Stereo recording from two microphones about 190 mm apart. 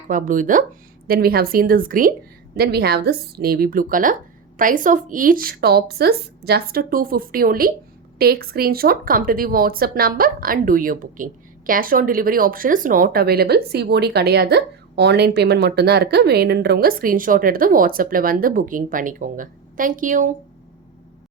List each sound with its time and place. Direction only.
0.1 s speech: 45° right (ahead or behind)